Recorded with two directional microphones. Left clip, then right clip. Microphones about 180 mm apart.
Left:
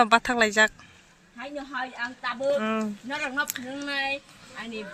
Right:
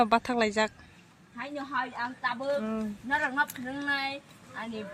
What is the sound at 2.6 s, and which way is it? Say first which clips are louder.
Speech: left 7 dB; 20° left (ahead or behind).